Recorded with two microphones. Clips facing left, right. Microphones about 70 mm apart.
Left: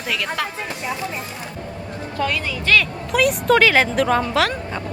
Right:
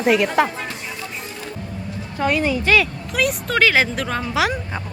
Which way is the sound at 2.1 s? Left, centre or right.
Right.